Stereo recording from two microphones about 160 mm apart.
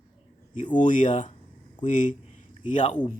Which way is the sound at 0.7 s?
50° left (ahead or behind).